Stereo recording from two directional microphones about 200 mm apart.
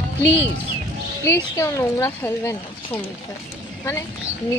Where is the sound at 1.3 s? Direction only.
15° left (ahead or behind).